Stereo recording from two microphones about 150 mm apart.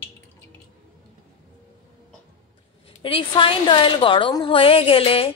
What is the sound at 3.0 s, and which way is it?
A woman's voice, 35° left (ahead or behind).